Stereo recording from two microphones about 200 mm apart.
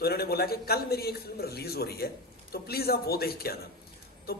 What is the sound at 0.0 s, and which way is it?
A man's voice, 50° left (ahead or behind).